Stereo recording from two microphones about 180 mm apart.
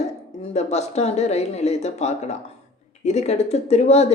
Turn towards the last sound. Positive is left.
turn(degrees=35)  # may be behind; listen again after turning